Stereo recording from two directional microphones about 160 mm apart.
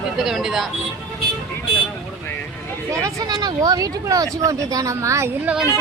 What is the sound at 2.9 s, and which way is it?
Speech, 20° right (ahead or behind).